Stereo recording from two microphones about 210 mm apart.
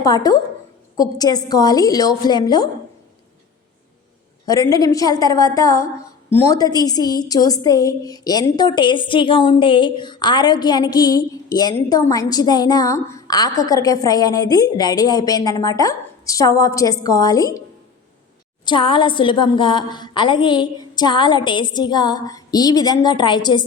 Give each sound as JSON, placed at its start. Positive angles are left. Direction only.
{"t": 0.0, "sound": "a woman's voice", "side_deg": 15}
{"t": 4.4, "sound": "a woman's voice", "side_deg": 15}
{"t": 18.6, "sound": "a woman's voice", "side_deg": 25}